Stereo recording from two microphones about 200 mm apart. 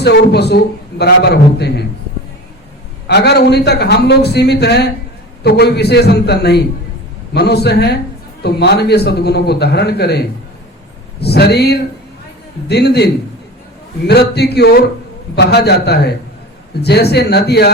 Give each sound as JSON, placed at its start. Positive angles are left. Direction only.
{"t": 0.0, "sound": "a man's voice", "side_deg": 55}
{"t": 3.1, "sound": "a man's voice", "side_deg": 55}
{"t": 14.1, "sound": "a man's voice", "side_deg": 55}